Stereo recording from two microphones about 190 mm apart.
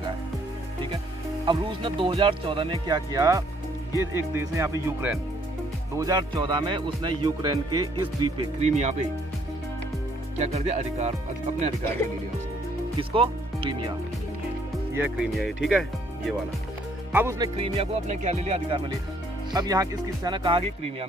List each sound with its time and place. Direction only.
1.4 s speech: 25° right (ahead or behind)
3.9 s music: 15° right (ahead or behind)
5.9 s speech: 20° right (ahead or behind); by 9.0 s 35° right (ahead or behind)
10.4 s music: 35° right (ahead or behind)
13.1 s speech: 30° right (ahead or behind)
15.0 s speech: centre (ahead or behind)
17.1 s music: 10° right (ahead or behind)
17.7 s music: 35° right (ahead or behind)
19.5 s speech: 20° right (ahead or behind)